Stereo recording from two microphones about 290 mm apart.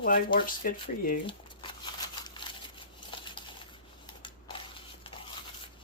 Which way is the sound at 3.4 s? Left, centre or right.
Centre.